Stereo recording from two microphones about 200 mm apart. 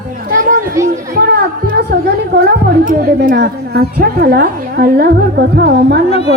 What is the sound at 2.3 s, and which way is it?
A woman's voice, 55° right (ahead or behind).